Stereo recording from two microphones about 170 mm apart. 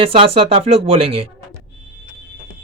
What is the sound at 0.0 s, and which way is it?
Speech, 35° right (ahead or behind).